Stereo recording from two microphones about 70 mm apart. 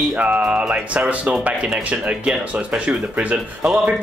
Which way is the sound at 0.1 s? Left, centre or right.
Centre.